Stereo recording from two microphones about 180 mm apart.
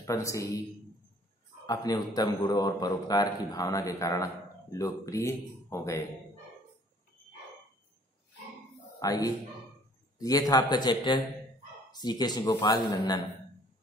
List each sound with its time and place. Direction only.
0.0 s a man's voice: 15° left (ahead or behind)
1.7 s a man's voice: 20° left (ahead or behind)
9.0 s a man's voice: 20° left (ahead or behind)